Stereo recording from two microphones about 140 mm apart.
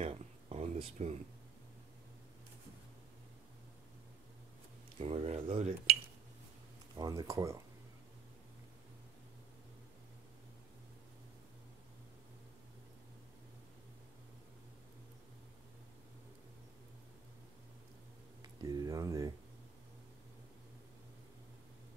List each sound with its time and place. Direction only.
0.0 s a sound: 45° right (ahead or behind)
5.0 s speech: 45° right (ahead or behind)
7.0 s speech: 25° right (ahead or behind)
18.4 s speech: 25° right (ahead or behind)